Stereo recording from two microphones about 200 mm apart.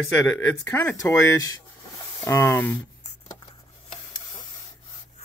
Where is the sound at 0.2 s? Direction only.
10° left (ahead or behind).